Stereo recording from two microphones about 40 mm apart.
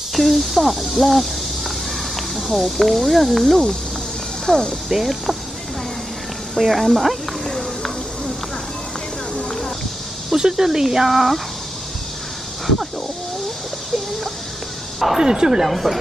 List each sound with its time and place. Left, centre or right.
0.1 s speech: centre
4.5 s speech: centre
4.8 s speech: centre
6.6 s speech: centre
7.4 s a sound: centre
10.3 s speech: centre
15.1 s speech: centre